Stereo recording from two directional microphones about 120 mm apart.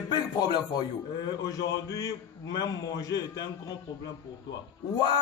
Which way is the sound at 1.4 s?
30° left (ahead or behind).